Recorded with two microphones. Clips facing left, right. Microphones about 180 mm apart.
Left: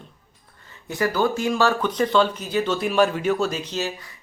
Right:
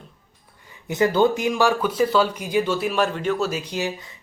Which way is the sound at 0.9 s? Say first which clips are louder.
Right 4 dB; 20° right (ahead or behind).